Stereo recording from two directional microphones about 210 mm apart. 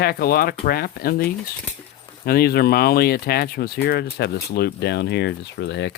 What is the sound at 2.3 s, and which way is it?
Speech, 45° left (ahead or behind).